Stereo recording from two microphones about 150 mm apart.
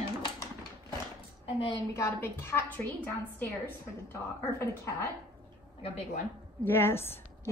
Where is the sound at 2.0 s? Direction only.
15° left (ahead or behind).